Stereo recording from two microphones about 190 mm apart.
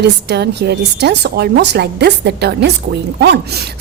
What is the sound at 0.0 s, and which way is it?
A woman's voice, 60° right (ahead or behind).